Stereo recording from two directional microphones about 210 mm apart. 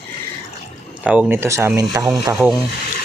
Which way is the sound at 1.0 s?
5° right (ahead or behind).